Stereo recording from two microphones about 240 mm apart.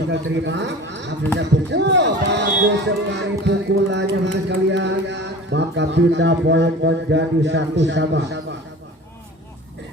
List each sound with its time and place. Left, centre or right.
0.1 s speech: right